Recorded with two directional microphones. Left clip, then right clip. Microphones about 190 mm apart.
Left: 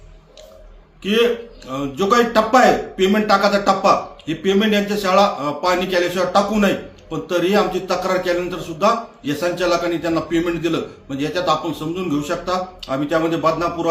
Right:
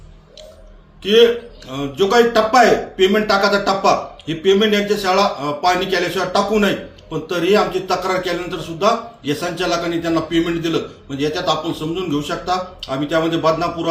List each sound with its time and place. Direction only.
1.0 s a man's voice: 20° left (ahead or behind)